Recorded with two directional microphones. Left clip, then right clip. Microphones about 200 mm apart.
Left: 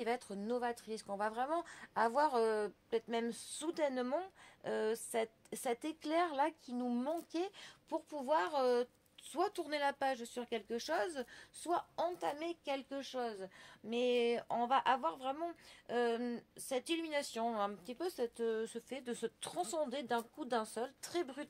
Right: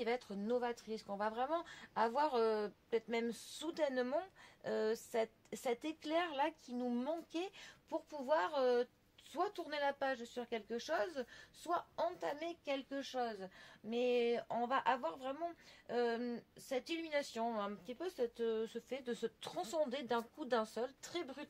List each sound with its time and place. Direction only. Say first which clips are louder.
0.0 s speech: left 1 dB; 35° left (ahead or behind)